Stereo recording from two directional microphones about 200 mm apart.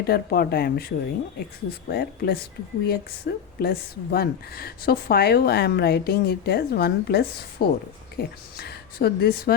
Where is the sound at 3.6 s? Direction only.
50° left (ahead or behind).